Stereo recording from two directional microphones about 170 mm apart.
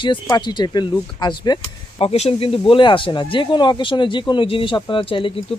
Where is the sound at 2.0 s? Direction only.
35° left (ahead or behind).